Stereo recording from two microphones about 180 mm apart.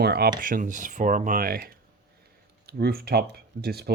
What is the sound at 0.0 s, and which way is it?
Speech, 65° right (ahead or behind).